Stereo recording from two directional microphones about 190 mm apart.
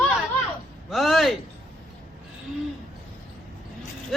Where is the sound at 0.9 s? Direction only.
Centre (ahead or behind).